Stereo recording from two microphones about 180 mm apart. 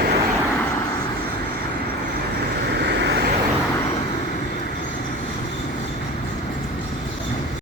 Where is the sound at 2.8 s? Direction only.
80° right.